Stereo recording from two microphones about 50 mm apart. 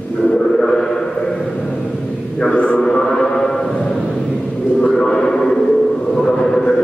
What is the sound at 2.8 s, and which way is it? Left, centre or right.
Music, centre.